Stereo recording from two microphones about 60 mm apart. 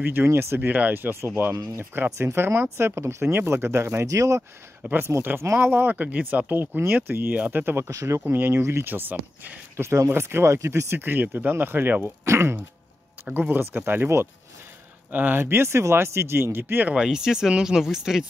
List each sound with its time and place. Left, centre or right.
0.0 s speech: right
0.6 s speech: right
1.2 s speech: right
2.0 s speech: right
2.3 s speech: right
4.1 s speech: right
4.9 s speech: right
8.3 s speech: right
9.8 s speech: right
13.2 s speech: right
15.0 s speech: right
16.9 s speech: centre